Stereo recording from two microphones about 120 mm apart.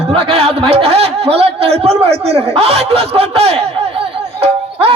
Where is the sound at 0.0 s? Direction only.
55° right (ahead or behind).